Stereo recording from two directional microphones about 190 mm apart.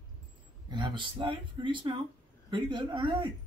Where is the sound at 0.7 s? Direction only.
25° right (ahead or behind).